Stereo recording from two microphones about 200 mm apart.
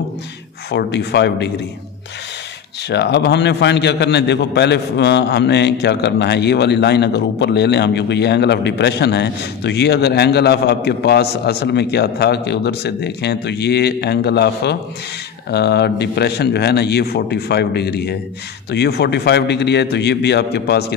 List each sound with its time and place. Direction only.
0.7 s a man's voice: 55° left (ahead or behind)
2.9 s a man's voice: 55° left (ahead or behind)